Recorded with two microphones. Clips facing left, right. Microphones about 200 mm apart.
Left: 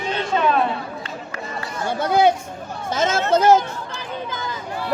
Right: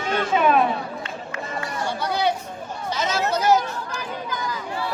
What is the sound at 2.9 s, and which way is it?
Chatter, 50° left (ahead or behind).